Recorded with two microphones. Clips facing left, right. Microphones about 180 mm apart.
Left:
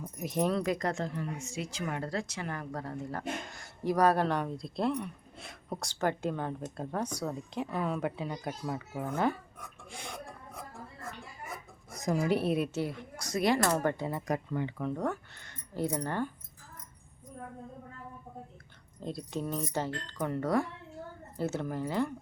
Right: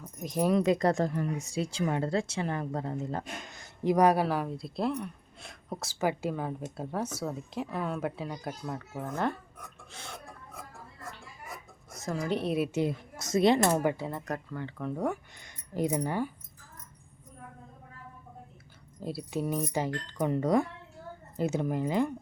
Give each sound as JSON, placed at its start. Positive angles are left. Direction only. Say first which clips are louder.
{"t": 0.0, "sound": "keys jangling", "louder": "even", "side_deg": 5}
{"t": 0.4, "sound": "speech", "louder": "right 6 dB", "side_deg": -20}
{"t": 11.9, "sound": "speech", "louder": "left 3 dB", "side_deg": 15}
{"t": 12.7, "sound": "a woman's voice", "louder": "right 4 dB", "side_deg": -20}
{"t": 13.8, "sound": "speech", "louder": "right 1 dB", "side_deg": 0}
{"t": 14.8, "sound": "speech", "louder": "right 1 dB", "side_deg": -5}
{"t": 18.9, "sound": "speech", "louder": "right 3 dB", "side_deg": -5}